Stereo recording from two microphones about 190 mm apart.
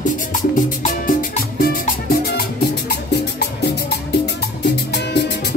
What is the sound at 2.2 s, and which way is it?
Music, 55° left (ahead or behind).